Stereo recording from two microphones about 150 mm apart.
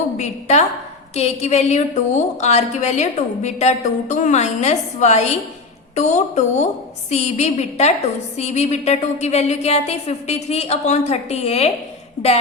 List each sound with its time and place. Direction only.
0.2 s a woman's voice: 50° left (ahead or behind)